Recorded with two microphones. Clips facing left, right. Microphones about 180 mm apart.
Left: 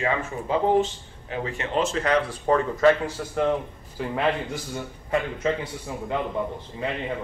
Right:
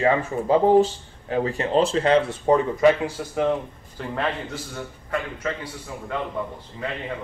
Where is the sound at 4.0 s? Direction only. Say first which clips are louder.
Left 2 dB; 5° left (ahead or behind).